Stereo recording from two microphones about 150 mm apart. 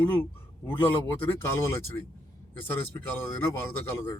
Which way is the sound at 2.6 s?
15° left (ahead or behind).